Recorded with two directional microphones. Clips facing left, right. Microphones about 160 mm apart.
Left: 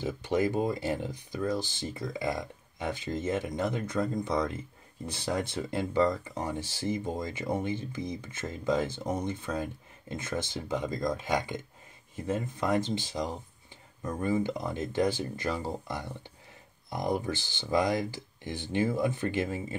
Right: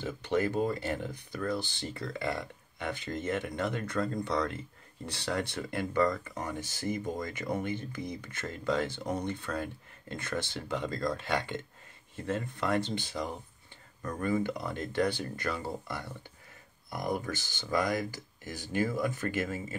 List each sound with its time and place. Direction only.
0.0 s speech: 10° left (ahead or behind)
6.6 s speech: 50° right (ahead or behind)
7.1 s speech: 20° left (ahead or behind)
18.1 s speech: 45° right (ahead or behind)
18.7 s speech: 20° left (ahead or behind)